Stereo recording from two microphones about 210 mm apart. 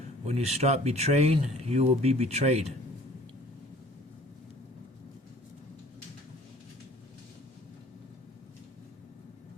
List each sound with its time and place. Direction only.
0.3 s speech: 30° right (ahead or behind)